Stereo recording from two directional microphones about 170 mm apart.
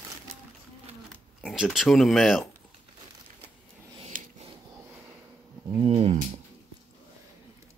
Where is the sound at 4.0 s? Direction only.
40° right (ahead or behind).